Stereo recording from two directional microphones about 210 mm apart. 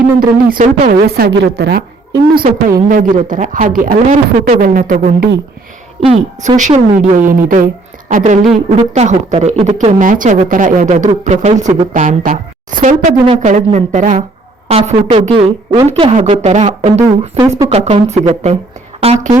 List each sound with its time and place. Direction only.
0.2 s speech: 40° right (ahead or behind)
2.6 s speech: 40° right (ahead or behind)
6.0 s speech: 30° right (ahead or behind)
11.6 s speech: 25° right (ahead or behind)
11.9 s speech: 40° right (ahead or behind)
17.0 s speech: 20° right (ahead or behind)
17.7 s a woman's voice: 30° right (ahead or behind)